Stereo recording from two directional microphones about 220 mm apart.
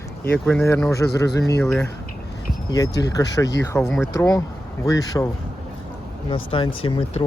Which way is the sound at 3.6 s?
15° left (ahead or behind).